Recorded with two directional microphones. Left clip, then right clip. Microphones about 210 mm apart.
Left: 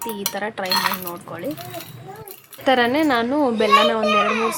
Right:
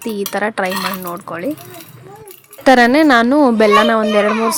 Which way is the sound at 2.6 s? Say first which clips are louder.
Right 8 dB; 35° right (ahead or behind).